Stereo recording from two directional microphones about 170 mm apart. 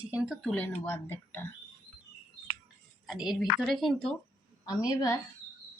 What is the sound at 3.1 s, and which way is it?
A woman's voice, centre (ahead or behind).